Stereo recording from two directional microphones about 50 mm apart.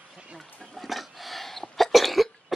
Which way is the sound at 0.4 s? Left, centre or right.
Centre.